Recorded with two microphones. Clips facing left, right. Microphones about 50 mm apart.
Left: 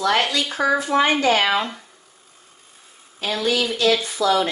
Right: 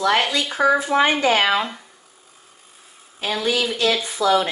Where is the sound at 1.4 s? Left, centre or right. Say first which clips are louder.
Right 1 dB; centre.